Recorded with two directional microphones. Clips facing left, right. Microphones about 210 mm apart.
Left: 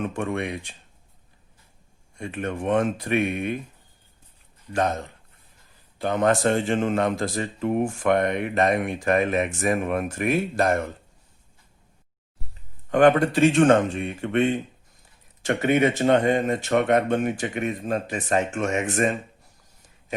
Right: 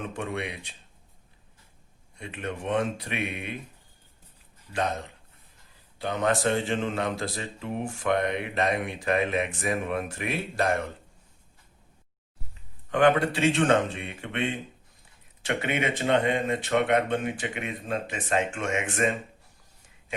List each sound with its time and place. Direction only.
0.1 s speech: 50° left (ahead or behind)
2.1 s speech: 45° left (ahead or behind)
4.7 s speech: 50° left (ahead or behind)
6.0 s speech: 50° left (ahead or behind)
12.9 s speech: 45° left (ahead or behind)
15.4 s speech: 45° left (ahead or behind)